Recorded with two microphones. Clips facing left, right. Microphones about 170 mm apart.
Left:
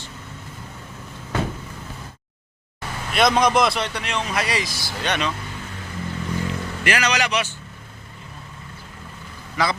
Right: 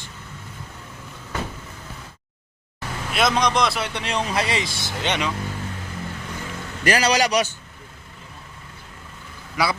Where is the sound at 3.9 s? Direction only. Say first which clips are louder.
Right 1 dB; 30° right (ahead or behind).